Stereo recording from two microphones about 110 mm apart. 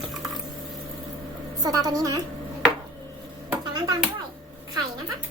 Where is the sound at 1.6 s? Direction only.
35° right (ahead or behind).